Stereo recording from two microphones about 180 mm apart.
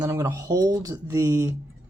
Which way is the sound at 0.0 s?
20° right (ahead or behind).